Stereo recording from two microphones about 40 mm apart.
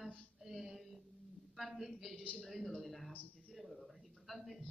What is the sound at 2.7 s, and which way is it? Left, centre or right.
Speech, centre.